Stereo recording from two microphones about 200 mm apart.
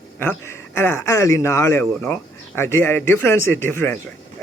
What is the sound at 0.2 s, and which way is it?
A man's voice, 10° left (ahead or behind).